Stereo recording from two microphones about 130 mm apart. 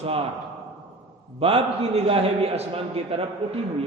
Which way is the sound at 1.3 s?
45° right (ahead or behind).